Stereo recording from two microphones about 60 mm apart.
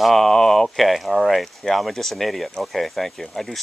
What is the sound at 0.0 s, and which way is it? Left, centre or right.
Speech, centre.